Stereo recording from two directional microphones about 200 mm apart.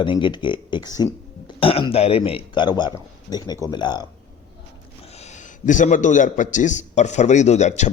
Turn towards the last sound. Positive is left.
turn(degrees=35)  # may be behind; listen again after turning